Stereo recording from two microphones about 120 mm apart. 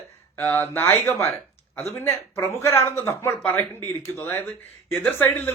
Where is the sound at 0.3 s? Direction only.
20° left (ahead or behind).